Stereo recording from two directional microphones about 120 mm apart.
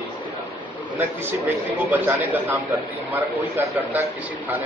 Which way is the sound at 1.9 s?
15° right (ahead or behind).